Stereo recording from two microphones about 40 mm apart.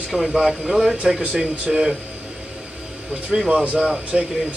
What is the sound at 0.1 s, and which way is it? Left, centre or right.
Speech, centre.